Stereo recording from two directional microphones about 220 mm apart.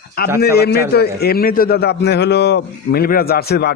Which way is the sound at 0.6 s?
45° left (ahead or behind).